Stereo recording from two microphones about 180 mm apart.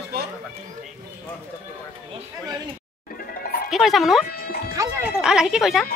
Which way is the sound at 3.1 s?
55° left (ahead or behind).